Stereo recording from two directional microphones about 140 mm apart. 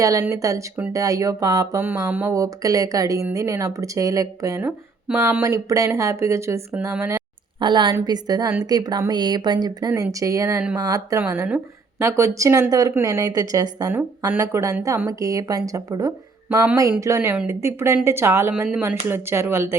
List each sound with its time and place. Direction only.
0.0 s a woman's voice: 25° right (ahead or behind)
1.8 s a woman's voice: 15° right (ahead or behind)
7.6 s a woman's voice: 35° right (ahead or behind)
11.2 s a woman's voice: 15° right (ahead or behind)